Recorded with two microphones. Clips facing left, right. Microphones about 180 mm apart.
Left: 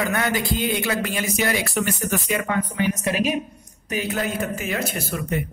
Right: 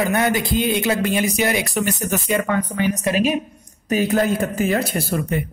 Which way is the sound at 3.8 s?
40° right (ahead or behind).